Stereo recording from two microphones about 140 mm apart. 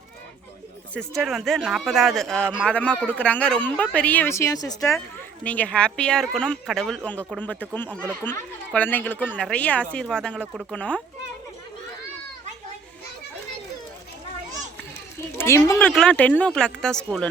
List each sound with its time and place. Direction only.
0.9 s speech: centre (ahead or behind); by 4.9 s 25° left (ahead or behind)
4.9 s speech: 10° left (ahead or behind)
15.4 s speech: 20° left (ahead or behind)
15.8 s speech: 5° left (ahead or behind)